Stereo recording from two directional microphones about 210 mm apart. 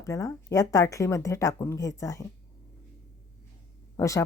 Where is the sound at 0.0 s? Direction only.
15° left (ahead or behind).